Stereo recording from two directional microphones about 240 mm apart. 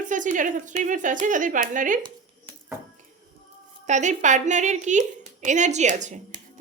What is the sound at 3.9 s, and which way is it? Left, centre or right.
A woman's voice, right.